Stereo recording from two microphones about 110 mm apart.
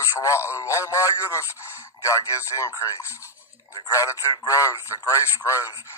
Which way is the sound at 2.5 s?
25° left (ahead or behind).